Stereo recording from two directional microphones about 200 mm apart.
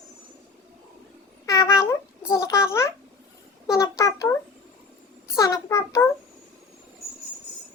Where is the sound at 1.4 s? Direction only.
15° left (ahead or behind).